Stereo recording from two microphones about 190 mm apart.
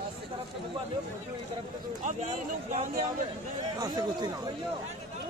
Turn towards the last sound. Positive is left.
turn(degrees=-20)  # may be behind; listen again after turning